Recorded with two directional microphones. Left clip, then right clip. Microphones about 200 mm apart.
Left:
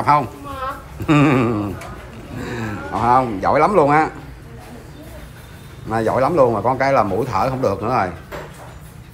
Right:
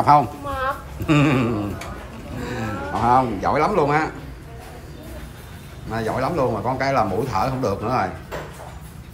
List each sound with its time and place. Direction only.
0.0 s speech: 15° right (ahead or behind)
5.9 s speech: 5° right (ahead or behind)